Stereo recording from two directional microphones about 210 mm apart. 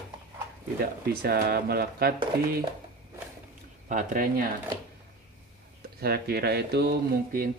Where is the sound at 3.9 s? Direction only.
40° right (ahead or behind).